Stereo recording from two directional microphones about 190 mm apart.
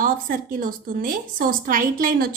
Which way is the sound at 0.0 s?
45° right (ahead or behind).